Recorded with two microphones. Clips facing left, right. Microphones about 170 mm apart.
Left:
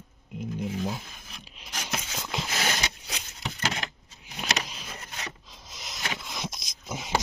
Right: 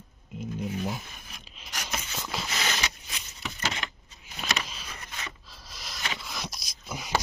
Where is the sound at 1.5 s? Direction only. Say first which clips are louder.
Left 1 dB; 10° left (ahead or behind).